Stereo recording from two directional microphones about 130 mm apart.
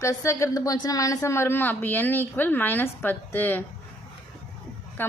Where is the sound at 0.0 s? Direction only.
25° left (ahead or behind).